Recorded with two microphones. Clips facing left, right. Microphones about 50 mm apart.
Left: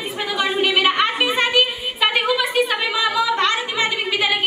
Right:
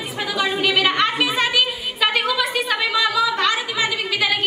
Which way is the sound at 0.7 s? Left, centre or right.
Centre.